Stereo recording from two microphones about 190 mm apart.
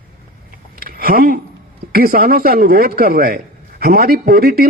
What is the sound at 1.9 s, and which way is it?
A man's voice, 50° right (ahead or behind).